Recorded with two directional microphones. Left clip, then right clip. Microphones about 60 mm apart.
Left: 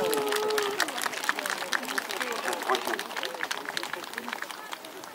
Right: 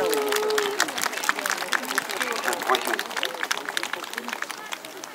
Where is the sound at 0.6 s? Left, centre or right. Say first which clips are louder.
Right 4 dB; right.